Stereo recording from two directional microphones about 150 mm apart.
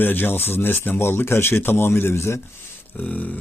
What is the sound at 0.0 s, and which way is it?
Speech, 15° left (ahead or behind).